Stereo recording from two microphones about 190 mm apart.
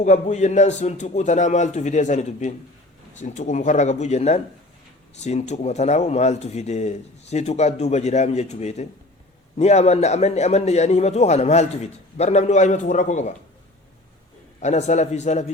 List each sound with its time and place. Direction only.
0.0 s a man's voice: 40° left (ahead or behind)
14.6 s a man's voice: 40° left (ahead or behind)